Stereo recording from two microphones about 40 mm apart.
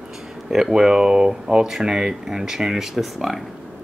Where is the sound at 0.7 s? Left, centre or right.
Centre.